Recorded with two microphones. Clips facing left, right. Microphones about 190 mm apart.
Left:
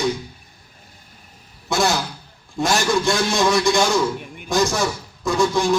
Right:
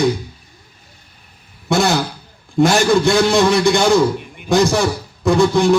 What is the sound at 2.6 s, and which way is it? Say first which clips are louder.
Speech: right 7 dB; 60° right (ahead or behind).